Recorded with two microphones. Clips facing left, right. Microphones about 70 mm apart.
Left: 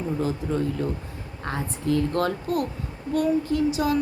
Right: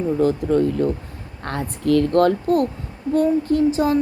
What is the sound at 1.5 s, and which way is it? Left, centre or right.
Speech, right.